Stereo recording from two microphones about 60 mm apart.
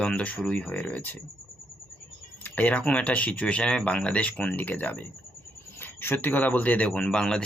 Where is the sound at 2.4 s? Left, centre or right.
Left.